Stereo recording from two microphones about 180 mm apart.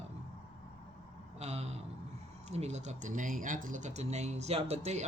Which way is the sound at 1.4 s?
35° right (ahead or behind).